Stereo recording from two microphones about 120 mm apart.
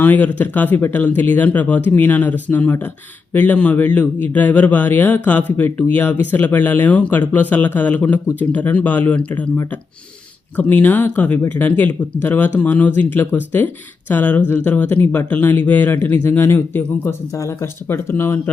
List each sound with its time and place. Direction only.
0.0 s a man's voice: 15° left (ahead or behind)
10.6 s a man's voice: 15° left (ahead or behind)